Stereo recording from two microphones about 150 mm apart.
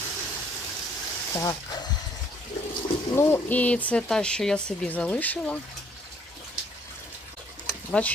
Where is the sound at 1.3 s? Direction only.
25° left (ahead or behind).